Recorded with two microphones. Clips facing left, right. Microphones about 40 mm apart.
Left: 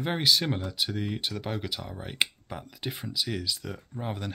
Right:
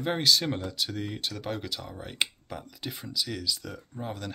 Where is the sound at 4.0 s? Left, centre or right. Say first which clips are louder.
Left 1 dB; left.